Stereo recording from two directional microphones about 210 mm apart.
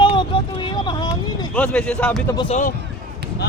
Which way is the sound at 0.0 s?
20° left (ahead or behind).